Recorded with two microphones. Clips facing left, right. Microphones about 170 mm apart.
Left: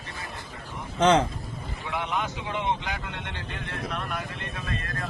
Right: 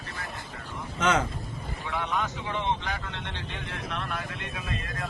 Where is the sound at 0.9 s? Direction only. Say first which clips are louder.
Left 5 dB; 30° left (ahead or behind).